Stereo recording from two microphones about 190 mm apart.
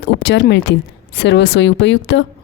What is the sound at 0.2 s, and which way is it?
A woman's voice, 65° left (ahead or behind).